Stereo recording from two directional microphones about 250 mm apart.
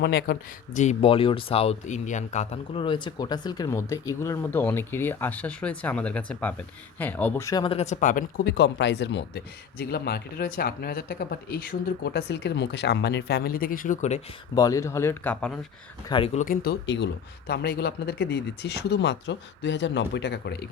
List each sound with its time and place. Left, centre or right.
0.0 s speech: left
14.5 s speech: centre
16.0 s speech: left